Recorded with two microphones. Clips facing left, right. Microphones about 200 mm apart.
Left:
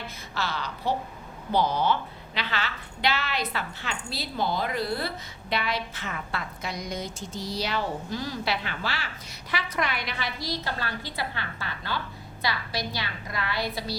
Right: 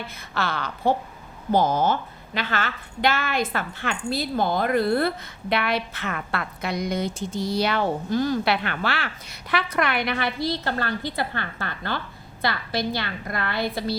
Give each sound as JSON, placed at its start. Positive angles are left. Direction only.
{"t": 0.3, "sound": "a woman's voice", "side_deg": -55}